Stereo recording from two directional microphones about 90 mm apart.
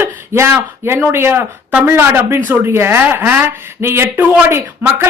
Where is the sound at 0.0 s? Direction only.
25° right (ahead or behind).